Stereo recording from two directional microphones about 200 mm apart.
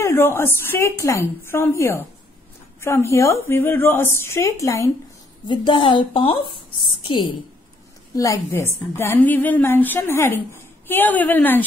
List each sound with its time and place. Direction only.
0.0 s a woman's voice: 10° left (ahead or behind)
8.2 s a woman's voice: 15° left (ahead or behind)